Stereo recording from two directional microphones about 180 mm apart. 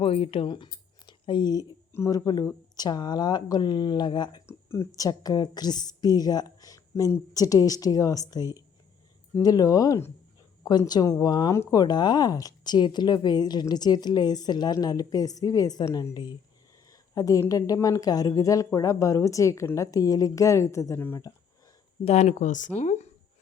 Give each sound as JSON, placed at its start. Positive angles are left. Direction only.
{"t": 0.0, "sound": "a woman's voice", "side_deg": 30}
{"t": 22.0, "sound": "speech", "side_deg": 40}